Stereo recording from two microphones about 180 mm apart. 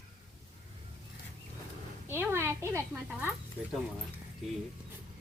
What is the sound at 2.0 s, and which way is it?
A woman's voice, 10° right (ahead or behind).